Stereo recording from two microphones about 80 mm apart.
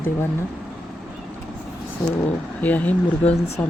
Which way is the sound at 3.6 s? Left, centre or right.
Left.